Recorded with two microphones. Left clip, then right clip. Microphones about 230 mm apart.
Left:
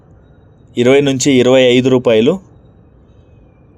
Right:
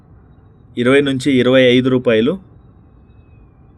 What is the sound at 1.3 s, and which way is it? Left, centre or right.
Speech, left.